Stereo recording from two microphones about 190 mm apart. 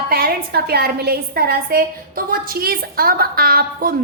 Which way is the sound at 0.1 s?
55° right (ahead or behind).